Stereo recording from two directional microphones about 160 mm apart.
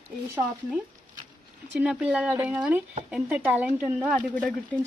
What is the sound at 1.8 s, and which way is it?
A woman's voice, 5° right (ahead or behind).